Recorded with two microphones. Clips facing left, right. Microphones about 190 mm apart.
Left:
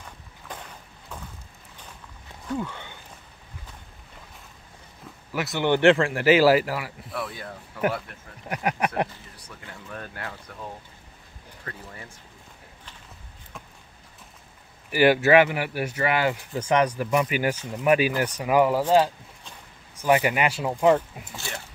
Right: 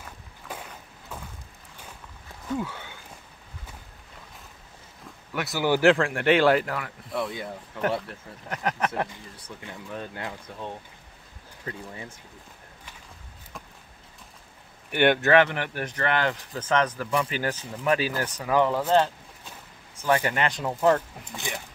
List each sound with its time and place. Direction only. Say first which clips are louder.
0.0 s a sound: even; 5° right (ahead or behind)
2.4 s a sound: even; 5° right (ahead or behind)
5.3 s speech: left 1 dB; centre (ahead or behind)
7.2 s speech: right 3 dB; 20° right (ahead or behind)
8.5 s speech: left 2 dB; 10° left (ahead or behind)
9.7 s speech: right 2 dB; 20° right (ahead or behind)
14.9 s speech: left 2 dB; 5° left (ahead or behind)